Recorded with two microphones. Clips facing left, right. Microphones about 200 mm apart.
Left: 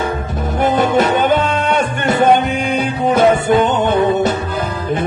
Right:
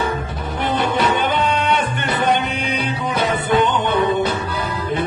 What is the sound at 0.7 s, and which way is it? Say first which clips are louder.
Music: left 4 dB; 45° left (ahead or behind).